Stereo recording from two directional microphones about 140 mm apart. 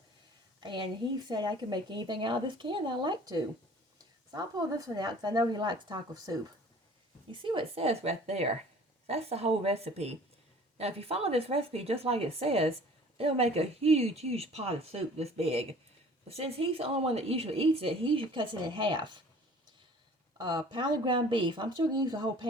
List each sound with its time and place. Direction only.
0.6 s a woman's voice: 35° right (ahead or behind)
20.4 s a woman's voice: 30° right (ahead or behind)